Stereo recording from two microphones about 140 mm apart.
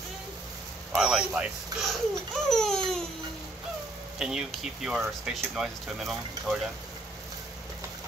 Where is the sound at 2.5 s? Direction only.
5° left (ahead or behind).